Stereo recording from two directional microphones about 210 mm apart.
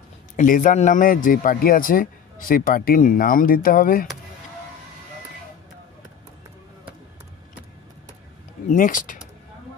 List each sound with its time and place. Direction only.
0.4 s speech: 40° left (ahead or behind)
8.6 s speech: 40° left (ahead or behind)